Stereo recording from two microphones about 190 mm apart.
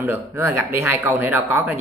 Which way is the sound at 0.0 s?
10° right (ahead or behind).